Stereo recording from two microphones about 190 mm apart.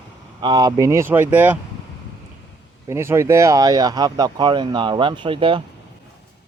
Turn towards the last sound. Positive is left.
turn(degrees=-25)  # may be behind; listen again after turning